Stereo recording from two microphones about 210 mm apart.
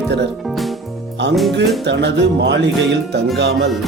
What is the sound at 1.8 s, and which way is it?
Speech, 55° right (ahead or behind).